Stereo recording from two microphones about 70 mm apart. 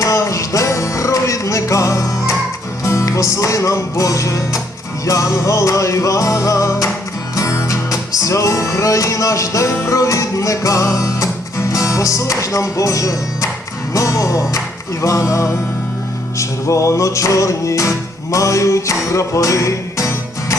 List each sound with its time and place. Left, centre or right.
0.0 s music: left
11.7 s speech: left
13.9 s music: left